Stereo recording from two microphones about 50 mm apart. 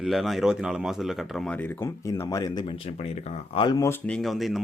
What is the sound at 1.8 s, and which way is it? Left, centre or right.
Speech, left.